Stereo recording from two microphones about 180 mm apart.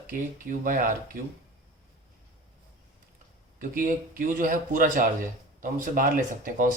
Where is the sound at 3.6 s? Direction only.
50° right (ahead or behind).